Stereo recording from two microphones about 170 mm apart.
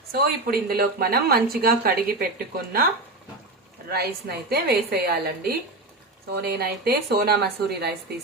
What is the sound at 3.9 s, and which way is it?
A woman's voice, 70° right (ahead or behind).